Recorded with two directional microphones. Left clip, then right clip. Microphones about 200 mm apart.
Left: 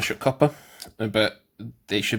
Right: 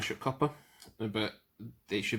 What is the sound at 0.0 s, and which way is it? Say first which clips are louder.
Speech: left 11 dB; 50° left (ahead or behind).